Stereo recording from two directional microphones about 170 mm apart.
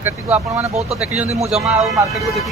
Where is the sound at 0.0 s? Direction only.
10° right (ahead or behind).